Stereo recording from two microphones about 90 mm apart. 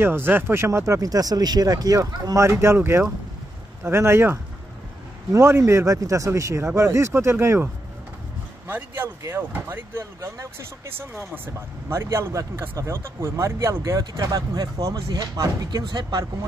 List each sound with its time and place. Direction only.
0.0 s speech: 25° right (ahead or behind); by 16.3 s 50° right (ahead or behind)